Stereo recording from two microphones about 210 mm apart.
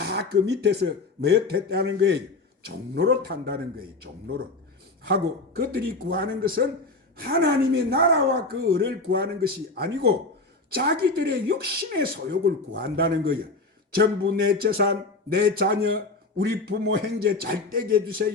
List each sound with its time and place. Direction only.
0.0 s speech: 50° right (ahead or behind)